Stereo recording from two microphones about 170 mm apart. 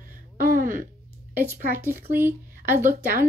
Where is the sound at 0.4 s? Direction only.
55° right (ahead or behind).